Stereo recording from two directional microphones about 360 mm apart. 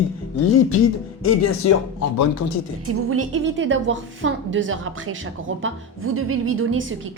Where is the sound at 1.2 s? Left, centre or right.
Left.